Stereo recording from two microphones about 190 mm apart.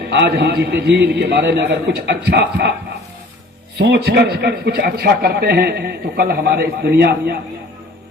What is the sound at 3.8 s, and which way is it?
A man's voice, 60° right (ahead or behind).